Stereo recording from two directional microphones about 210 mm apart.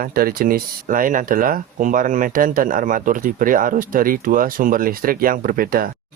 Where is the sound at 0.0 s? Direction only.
45° right (ahead or behind).